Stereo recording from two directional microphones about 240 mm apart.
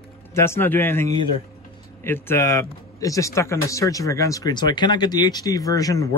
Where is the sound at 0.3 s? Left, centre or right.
Centre.